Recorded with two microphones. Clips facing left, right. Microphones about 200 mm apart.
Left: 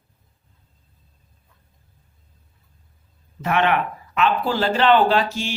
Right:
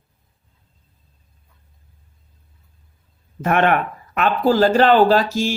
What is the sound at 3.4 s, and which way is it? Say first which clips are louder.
Speech: right 3 dB; 50° right (ahead or behind).